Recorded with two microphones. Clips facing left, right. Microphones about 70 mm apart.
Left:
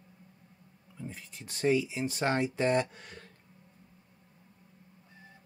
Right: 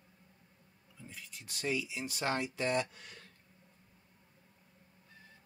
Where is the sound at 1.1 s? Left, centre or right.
Left.